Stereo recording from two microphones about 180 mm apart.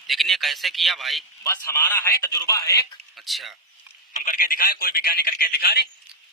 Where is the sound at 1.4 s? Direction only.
15° left (ahead or behind).